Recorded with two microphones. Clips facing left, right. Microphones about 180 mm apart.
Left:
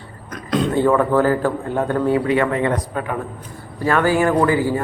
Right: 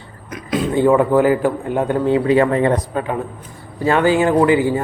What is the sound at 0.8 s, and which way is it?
Speech, 15° right (ahead or behind).